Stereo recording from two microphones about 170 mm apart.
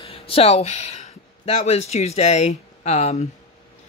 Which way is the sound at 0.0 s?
35° left (ahead or behind).